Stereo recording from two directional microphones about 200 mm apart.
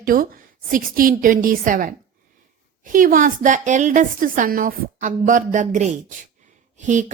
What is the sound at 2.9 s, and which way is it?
A woman's voice, 40° right (ahead or behind).